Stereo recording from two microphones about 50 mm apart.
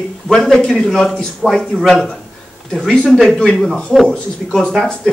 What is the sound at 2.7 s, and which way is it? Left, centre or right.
A man's voice, centre.